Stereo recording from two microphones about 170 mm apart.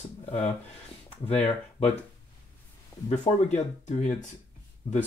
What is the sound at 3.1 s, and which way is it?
Speech, 40° left (ahead or behind).